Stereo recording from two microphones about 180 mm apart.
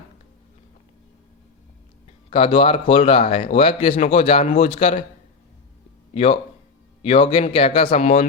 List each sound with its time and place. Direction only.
2.0 s speech: 30° left (ahead or behind)
6.1 s speech: 30° left (ahead or behind)